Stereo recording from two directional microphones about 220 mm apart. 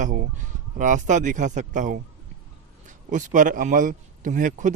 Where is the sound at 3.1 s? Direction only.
35° right (ahead or behind).